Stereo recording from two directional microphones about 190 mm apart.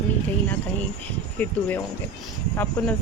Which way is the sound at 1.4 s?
10° left (ahead or behind).